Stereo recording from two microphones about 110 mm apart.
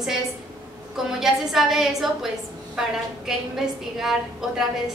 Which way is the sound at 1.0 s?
5° right (ahead or behind).